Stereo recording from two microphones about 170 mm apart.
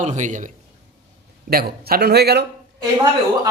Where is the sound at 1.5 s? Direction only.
65° right (ahead or behind).